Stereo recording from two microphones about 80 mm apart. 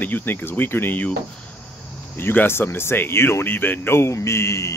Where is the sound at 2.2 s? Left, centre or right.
Left.